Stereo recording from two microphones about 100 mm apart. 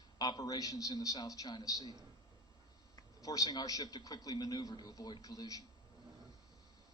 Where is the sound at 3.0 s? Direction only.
35° left (ahead or behind).